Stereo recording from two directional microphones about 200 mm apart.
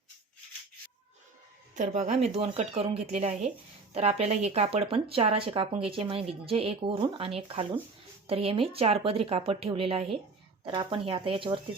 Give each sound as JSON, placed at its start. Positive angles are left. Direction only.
{"t": 1.7, "sound": "speech", "side_deg": -35}